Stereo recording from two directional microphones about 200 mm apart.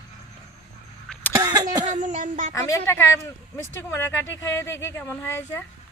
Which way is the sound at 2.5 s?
15° left (ahead or behind).